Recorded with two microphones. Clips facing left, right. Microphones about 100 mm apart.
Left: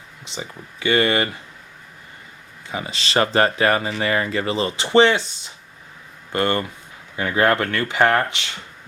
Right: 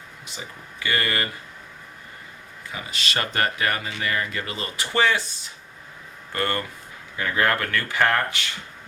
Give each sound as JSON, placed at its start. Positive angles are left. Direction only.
{"t": 0.3, "sound": "speech", "side_deg": 25}
{"t": 2.6, "sound": "speech", "side_deg": 25}
{"t": 6.3, "sound": "speech", "side_deg": 25}